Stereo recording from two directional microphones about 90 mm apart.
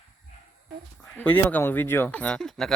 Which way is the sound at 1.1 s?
20° left (ahead or behind).